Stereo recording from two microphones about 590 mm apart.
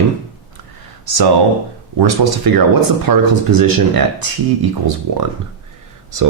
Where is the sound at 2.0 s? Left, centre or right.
Right.